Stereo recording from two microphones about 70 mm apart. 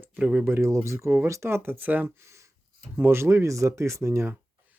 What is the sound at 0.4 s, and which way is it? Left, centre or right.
Speech, right.